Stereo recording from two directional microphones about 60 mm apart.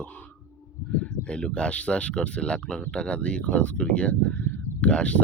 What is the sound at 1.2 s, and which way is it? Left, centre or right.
Speech, centre.